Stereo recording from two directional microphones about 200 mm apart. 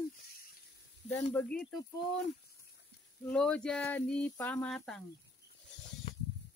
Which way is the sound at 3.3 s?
5° left (ahead or behind).